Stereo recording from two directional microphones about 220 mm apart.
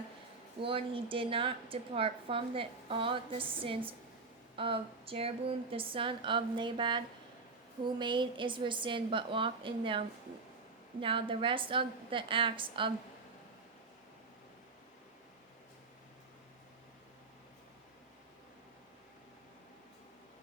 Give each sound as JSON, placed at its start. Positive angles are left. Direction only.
{"t": 0.6, "sound": "a woman's voice", "side_deg": -25}
{"t": 11.0, "sound": "a woman's voice", "side_deg": -25}